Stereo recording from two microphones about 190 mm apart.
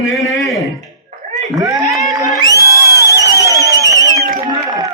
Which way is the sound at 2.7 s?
15° left (ahead or behind).